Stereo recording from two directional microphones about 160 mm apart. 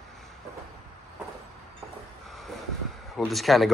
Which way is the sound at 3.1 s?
Centre (ahead or behind).